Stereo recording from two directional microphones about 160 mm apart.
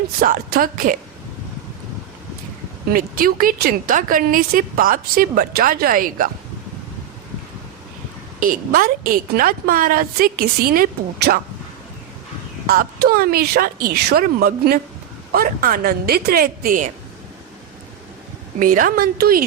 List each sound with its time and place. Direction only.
0.2 s a woman's voice: 65° right (ahead or behind)
2.9 s a woman's voice: 65° right (ahead or behind)
8.4 s a woman's voice: 60° right (ahead or behind)
12.6 s speech: 70° right (ahead or behind)
18.6 s a woman's voice: 60° right (ahead or behind)